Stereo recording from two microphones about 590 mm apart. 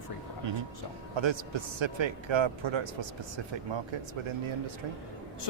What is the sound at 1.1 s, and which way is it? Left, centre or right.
A man's voice, right.